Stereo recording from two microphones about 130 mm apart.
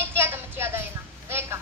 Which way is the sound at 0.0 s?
20° right (ahead or behind).